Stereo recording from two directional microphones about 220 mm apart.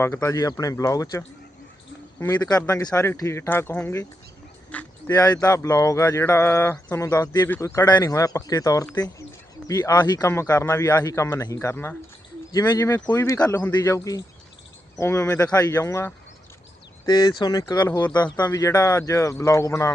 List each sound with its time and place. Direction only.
0.0 s speech: 10° left (ahead or behind)
4.7 s a sound: 5° left (ahead or behind)
5.1 s speech: 15° left (ahead or behind)